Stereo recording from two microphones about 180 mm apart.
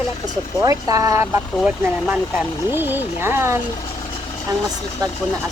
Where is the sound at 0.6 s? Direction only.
20° right (ahead or behind).